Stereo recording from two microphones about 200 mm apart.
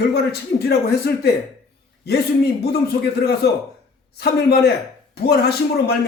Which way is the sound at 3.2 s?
50° left (ahead or behind).